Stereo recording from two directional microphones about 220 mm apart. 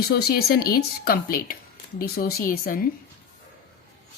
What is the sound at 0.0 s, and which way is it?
Speech, 45° left (ahead or behind).